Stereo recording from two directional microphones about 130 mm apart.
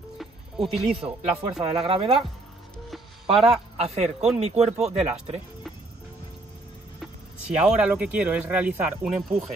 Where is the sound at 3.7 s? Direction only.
55° right (ahead or behind).